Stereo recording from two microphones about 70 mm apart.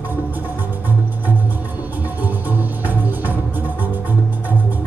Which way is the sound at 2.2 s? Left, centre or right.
Right.